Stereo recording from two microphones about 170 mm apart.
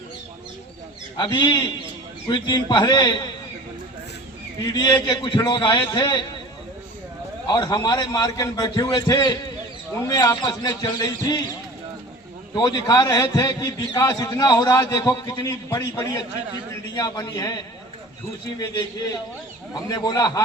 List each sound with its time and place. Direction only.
1.1 s a man's voice: 25° left (ahead or behind)
4.6 s a man's voice: 25° left (ahead or behind)
7.4 s a man's voice: 25° left (ahead or behind)
12.5 s a man's voice: 25° left (ahead or behind)
19.7 s a man's voice: 25° left (ahead or behind)